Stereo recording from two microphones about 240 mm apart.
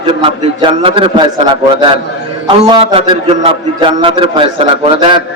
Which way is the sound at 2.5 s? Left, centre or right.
Right.